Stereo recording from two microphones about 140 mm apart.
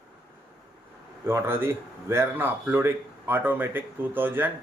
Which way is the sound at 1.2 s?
15° right (ahead or behind).